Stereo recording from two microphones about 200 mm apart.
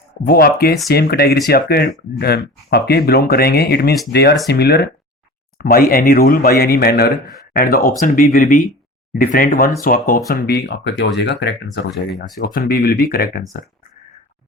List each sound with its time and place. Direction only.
0.3 s speech: 50° left (ahead or behind)
11.9 s speech: centre (ahead or behind)
12.4 s speech: 45° left (ahead or behind)